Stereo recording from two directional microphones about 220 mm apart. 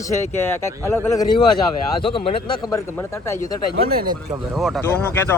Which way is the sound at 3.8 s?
40° right (ahead or behind).